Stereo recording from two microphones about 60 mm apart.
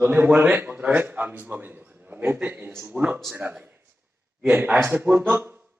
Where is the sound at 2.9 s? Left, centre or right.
Right.